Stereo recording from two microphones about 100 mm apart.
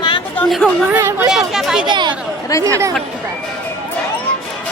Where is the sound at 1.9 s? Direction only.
50° right (ahead or behind).